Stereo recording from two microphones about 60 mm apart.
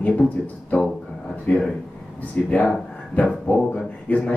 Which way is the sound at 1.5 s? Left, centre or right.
Left.